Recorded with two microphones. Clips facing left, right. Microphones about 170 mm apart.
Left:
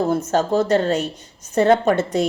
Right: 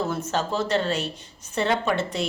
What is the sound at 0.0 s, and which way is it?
A woman's voice, 40° left (ahead or behind).